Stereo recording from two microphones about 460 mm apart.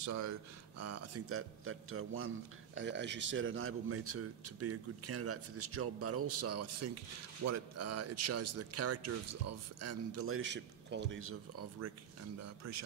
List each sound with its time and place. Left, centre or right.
0.0 s a man's voice: right